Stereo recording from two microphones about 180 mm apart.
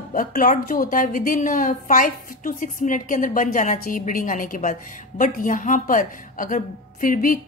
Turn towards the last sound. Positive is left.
turn(degrees=50)  # may be behind; listen again after turning